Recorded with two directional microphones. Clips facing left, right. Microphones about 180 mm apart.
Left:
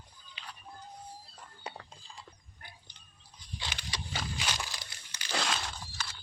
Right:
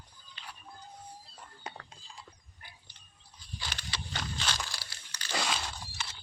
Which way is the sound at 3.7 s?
10° left (ahead or behind).